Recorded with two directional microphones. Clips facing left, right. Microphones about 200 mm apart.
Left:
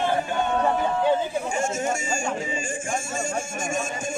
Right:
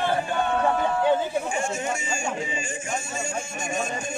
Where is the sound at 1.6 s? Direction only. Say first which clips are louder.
Left 2 dB; 45° left (ahead or behind).